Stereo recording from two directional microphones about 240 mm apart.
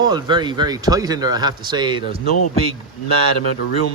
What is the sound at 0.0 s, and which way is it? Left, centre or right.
A man's voice, centre.